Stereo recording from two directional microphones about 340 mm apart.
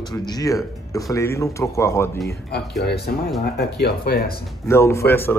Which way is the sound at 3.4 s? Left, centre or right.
Left.